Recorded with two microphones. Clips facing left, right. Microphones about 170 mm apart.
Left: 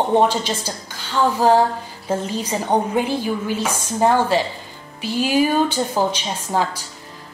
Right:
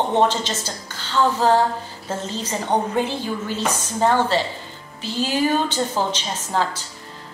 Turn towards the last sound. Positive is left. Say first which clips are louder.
# left 2 dB
turn(degrees=10)  # may be behind; listen again after turning